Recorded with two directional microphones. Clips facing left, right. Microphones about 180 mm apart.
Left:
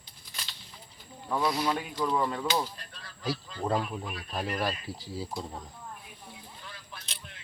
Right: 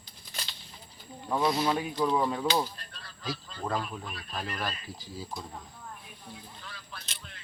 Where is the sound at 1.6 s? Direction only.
10° right (ahead or behind).